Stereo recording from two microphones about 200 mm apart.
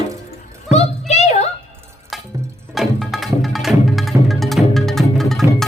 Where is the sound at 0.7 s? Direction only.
35° left (ahead or behind).